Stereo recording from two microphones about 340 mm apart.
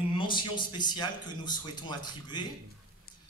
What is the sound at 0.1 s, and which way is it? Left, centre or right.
Speech, centre.